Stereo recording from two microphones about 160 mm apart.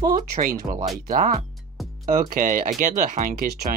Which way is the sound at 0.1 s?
60° right (ahead or behind).